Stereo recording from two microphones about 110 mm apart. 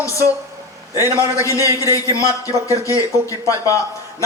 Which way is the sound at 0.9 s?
25° right (ahead or behind).